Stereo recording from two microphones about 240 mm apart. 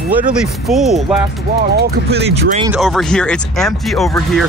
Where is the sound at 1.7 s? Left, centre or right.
Right.